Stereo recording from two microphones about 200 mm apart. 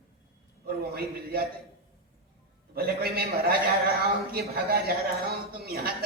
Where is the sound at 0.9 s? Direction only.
50° right (ahead or behind).